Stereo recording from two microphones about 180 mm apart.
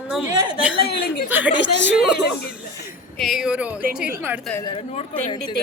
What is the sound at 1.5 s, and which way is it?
Speech, 80° left.